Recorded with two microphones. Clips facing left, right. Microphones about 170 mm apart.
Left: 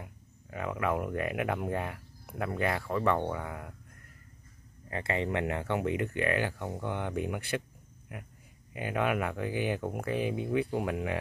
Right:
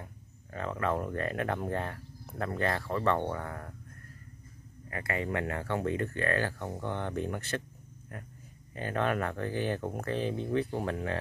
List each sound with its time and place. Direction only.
0.0 s speech: 10° left (ahead or behind)
4.8 s speech: 25° left (ahead or behind)